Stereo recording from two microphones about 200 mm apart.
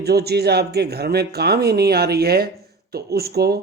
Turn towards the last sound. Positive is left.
turn(degrees=-50)  # may be behind; listen again after turning